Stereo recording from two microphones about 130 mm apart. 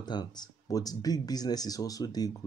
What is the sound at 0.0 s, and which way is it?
Speech, 35° left (ahead or behind).